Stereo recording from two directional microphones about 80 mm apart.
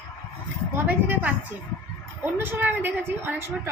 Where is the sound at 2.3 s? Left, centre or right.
Right.